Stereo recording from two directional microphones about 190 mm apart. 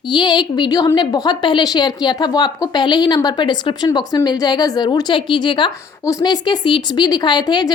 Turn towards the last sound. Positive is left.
turn(degrees=20)  # may be behind; listen again after turning